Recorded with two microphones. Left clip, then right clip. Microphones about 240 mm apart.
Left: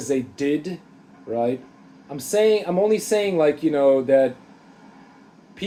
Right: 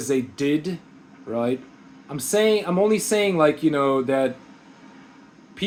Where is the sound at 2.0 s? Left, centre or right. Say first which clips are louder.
Left 1 dB; right.